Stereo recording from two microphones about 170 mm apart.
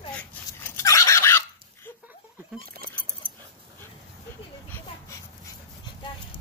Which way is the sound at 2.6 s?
60° right (ahead or behind).